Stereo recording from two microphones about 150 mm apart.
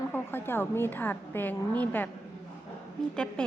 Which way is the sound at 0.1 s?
15° left (ahead or behind).